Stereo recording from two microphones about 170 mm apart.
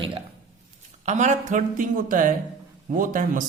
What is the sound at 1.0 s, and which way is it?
Speech, 45° right (ahead or behind).